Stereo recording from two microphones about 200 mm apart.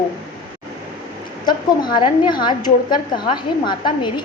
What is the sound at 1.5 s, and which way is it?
A woman's voice, 20° left (ahead or behind).